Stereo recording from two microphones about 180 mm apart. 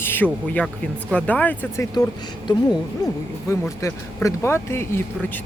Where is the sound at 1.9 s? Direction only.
25° left (ahead or behind).